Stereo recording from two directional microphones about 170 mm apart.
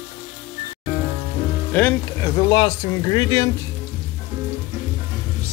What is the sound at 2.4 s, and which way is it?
Speech, 25° left (ahead or behind).